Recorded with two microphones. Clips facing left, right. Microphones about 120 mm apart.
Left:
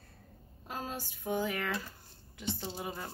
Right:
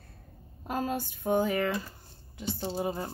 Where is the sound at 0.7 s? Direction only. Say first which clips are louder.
Right 9 dB; 60° right (ahead or behind).